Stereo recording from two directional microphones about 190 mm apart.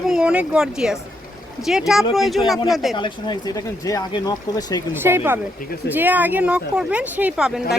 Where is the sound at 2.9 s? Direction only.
25° left (ahead or behind).